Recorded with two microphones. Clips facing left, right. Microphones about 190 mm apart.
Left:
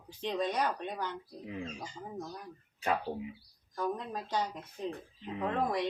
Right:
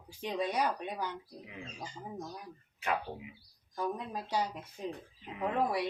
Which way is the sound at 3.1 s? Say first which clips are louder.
Left 6 dB; 25° left (ahead or behind).